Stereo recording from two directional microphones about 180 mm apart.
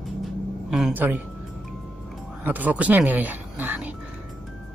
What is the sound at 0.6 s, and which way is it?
Speech, 5° right (ahead or behind).